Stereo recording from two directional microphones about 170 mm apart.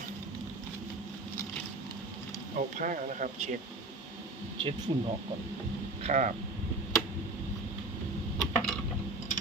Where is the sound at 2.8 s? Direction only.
50° right (ahead or behind).